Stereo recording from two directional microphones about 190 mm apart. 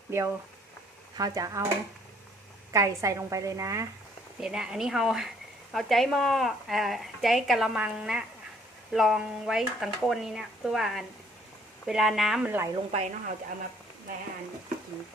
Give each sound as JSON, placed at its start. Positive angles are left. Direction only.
{"t": 0.1, "sound": "a woman's voice", "side_deg": -15}
{"t": 2.7, "sound": "a woman's voice", "side_deg": -15}
{"t": 4.4, "sound": "speech", "side_deg": -5}
{"t": 12.7, "sound": "speech", "side_deg": -35}